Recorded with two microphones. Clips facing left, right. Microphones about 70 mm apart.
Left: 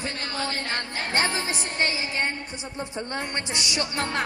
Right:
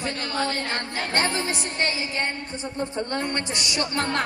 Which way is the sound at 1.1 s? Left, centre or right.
Centre.